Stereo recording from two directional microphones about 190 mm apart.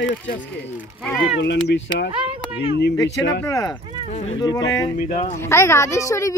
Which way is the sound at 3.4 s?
15° left (ahead or behind).